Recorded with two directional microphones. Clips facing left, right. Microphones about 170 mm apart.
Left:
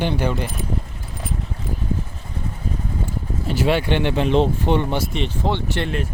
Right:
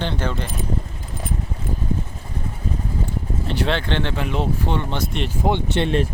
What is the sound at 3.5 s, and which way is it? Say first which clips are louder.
Speech: left 4 dB; 5° left (ahead or behind).